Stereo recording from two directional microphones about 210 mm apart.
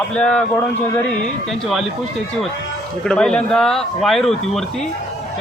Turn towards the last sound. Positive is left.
turn(degrees=0)  # may be behind; listen again after turning